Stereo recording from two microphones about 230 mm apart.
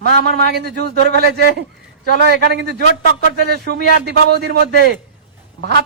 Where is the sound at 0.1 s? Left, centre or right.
Right.